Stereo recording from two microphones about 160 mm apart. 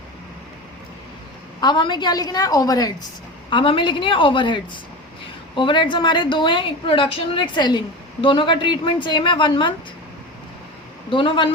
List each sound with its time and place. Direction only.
1.6 s a woman's voice: 30° left (ahead or behind)
11.1 s a woman's voice: 30° left (ahead or behind)